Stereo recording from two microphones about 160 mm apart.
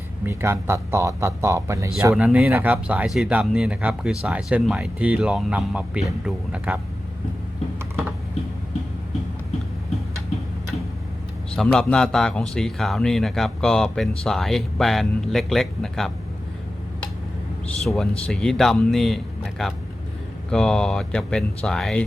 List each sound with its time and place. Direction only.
0.3 s speech: 15° right (ahead or behind)
11.5 s speech: 5° left (ahead or behind)
17.8 s speech: centre (ahead or behind)